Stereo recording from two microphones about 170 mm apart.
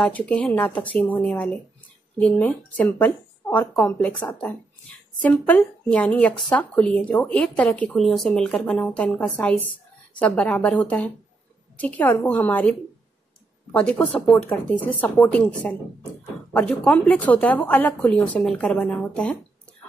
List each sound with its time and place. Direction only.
0.0 s speech: 5° left (ahead or behind)